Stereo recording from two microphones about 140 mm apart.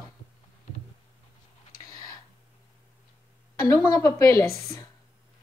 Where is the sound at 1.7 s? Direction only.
90° left.